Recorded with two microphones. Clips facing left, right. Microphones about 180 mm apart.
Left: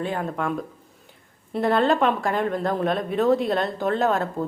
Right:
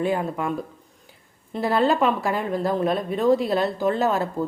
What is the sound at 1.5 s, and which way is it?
A woman's voice, centre (ahead or behind).